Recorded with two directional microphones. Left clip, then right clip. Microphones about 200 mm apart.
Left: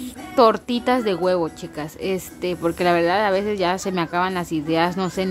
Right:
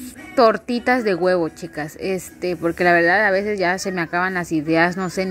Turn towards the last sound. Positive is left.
turn(degrees=-10)  # may be behind; listen again after turning